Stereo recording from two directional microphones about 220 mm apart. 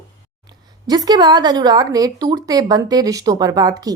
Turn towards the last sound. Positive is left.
turn(degrees=-15)  # may be behind; listen again after turning